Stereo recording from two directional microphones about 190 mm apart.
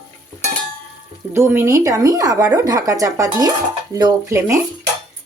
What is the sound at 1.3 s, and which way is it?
Speech, 15° right (ahead or behind).